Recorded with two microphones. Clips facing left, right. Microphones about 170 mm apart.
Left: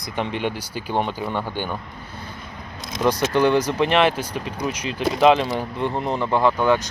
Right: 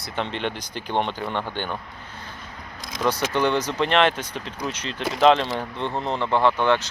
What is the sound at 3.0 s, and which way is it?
Speech, 10° left (ahead or behind).